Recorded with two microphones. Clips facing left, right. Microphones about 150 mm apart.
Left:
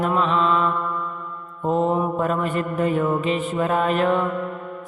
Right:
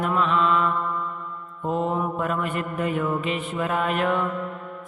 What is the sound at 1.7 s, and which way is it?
Mantra, 35° left (ahead or behind).